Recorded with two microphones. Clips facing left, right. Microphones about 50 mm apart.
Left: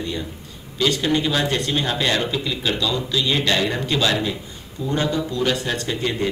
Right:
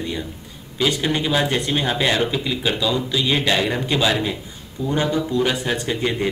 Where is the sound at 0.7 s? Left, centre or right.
Centre.